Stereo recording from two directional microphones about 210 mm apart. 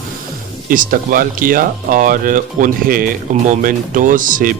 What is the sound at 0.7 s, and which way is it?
Speech, 40° right (ahead or behind).